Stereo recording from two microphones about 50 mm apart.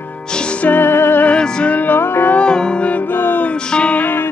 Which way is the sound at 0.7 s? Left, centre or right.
Left.